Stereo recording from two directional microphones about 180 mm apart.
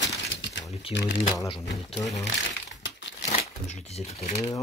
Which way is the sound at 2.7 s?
80° left.